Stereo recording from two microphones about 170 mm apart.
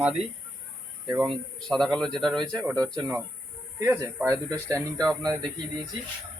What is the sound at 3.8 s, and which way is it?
Speech, 15° right (ahead or behind).